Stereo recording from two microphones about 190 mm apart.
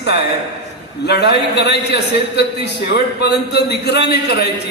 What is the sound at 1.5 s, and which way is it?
A man's voice, 60° left (ahead or behind).